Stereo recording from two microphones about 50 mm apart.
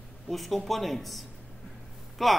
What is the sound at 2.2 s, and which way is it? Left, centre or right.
Speech, centre.